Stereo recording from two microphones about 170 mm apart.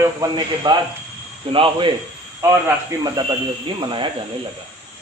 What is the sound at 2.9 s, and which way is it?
Speech, 20° right (ahead or behind).